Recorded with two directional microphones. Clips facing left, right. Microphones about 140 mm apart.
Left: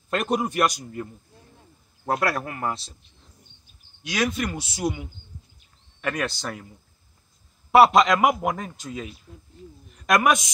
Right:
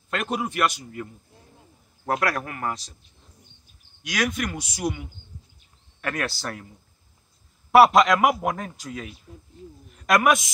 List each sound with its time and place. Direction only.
0.1 s a man's voice: 40° left (ahead or behind)
2.0 s speech: centre (ahead or behind)
2.4 s a man's voice: 25° left (ahead or behind)
4.0 s a man's voice: 25° left (ahead or behind)
6.1 s a man's voice: 20° left (ahead or behind)
7.7 s a man's voice: 20° left (ahead or behind)
9.3 s speech: 10° right (ahead or behind)
10.0 s a man's voice: 20° left (ahead or behind)